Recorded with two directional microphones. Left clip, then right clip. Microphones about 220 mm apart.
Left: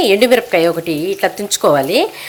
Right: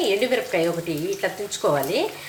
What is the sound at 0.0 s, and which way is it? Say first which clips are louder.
Speech: left 10 dB; 50° left (ahead or behind).